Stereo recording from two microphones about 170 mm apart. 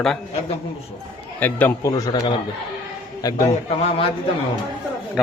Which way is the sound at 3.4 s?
40° left (ahead or behind).